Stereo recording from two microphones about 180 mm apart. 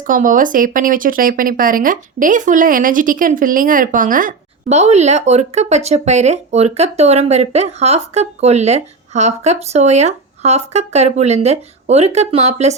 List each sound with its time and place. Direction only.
0.0 s speech: 45° right (ahead or behind)